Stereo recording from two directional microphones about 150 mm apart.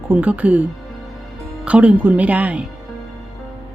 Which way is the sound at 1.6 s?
10° right (ahead or behind).